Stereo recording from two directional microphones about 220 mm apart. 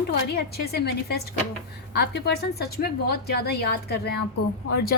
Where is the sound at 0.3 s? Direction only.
45° left (ahead or behind).